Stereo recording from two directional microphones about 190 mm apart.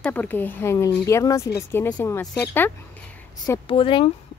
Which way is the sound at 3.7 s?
25° left (ahead or behind).